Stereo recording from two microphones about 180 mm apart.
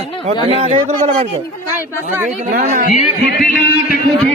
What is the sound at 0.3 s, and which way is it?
Speech, 35° right (ahead or behind).